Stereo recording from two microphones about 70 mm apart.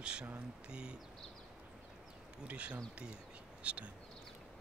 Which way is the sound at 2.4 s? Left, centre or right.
Centre.